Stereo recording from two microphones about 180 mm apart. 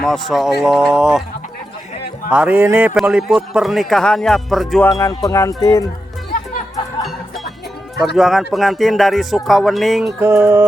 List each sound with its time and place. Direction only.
0.0 s a man's voice: centre (ahead or behind)
2.3 s a man's voice: 10° right (ahead or behind)
4.9 s speech: 15° left (ahead or behind)
8.0 s a man's voice: centre (ahead or behind)
10.2 s music: 10° right (ahead or behind)